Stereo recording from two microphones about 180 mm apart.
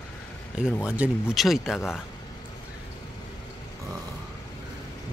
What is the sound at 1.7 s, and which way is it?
Speech, 15° left (ahead or behind).